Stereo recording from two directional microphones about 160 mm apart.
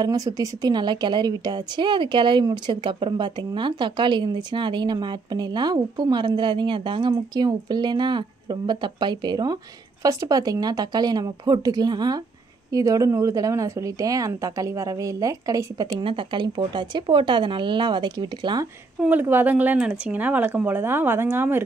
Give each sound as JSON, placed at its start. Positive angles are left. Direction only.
{"t": 0.0, "sound": "a woman's voice", "side_deg": -20}
{"t": 16.0, "sound": "a woman's voice", "side_deg": -30}
{"t": 18.9, "sound": "speech", "side_deg": -10}